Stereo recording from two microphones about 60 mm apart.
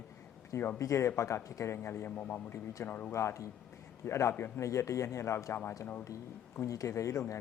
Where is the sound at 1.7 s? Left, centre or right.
Left.